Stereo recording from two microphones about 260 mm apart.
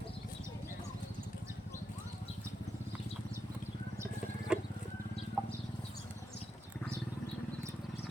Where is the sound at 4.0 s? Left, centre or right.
Centre.